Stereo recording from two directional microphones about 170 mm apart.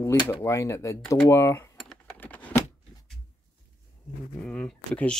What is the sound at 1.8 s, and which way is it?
Keys jangling, 5° left (ahead or behind).